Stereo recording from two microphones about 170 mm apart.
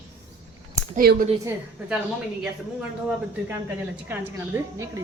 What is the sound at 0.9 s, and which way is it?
Speech, 60° right (ahead or behind).